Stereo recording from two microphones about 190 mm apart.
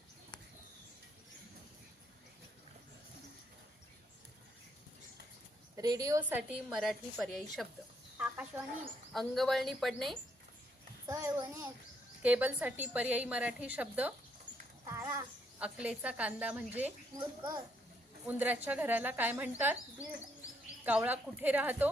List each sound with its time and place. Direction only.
5.7 s a woman's voice: 20° right (ahead or behind); by 10.2 s centre (ahead or behind)
11.0 s a woman's voice: 20° right (ahead or behind)
17.2 s a child's voice: 25° right (ahead or behind)
18.3 s a woman's voice: 10° right (ahead or behind)
20.8 s a woman's voice: 10° right (ahead or behind)